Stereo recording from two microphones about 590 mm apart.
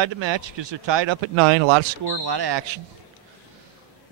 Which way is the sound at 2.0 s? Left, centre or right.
Right.